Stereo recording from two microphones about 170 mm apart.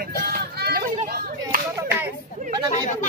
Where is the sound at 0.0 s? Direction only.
65° right (ahead or behind).